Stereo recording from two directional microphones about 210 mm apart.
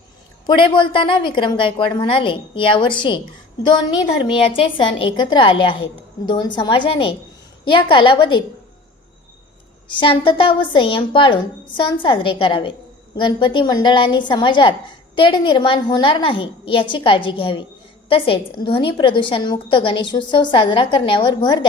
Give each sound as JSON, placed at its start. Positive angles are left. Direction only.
{"t": 0.4, "sound": "a woman's voice", "side_deg": 25}
{"t": 4.5, "sound": "a woman's voice", "side_deg": 25}
{"t": 9.9, "sound": "a woman's voice", "side_deg": 25}